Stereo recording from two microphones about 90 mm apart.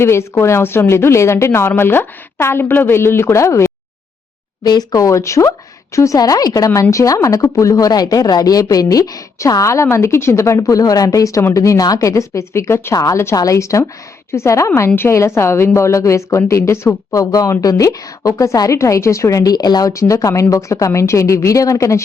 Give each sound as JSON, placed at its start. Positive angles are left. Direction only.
{"t": 0.0, "sound": "a woman's voice", "side_deg": 30}
{"t": 4.6, "sound": "a woman's voice", "side_deg": 50}